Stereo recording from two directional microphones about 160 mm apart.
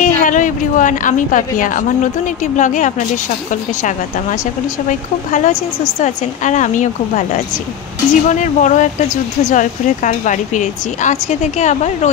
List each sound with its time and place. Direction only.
0.0 s a woman's voice: 55° left (ahead or behind)
4.8 s speech: 50° left (ahead or behind)